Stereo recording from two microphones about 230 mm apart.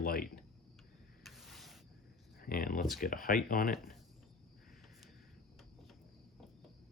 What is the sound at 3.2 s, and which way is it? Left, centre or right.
Speech, left.